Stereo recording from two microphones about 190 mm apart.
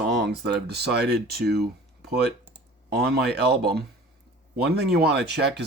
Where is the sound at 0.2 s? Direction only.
60° right (ahead or behind).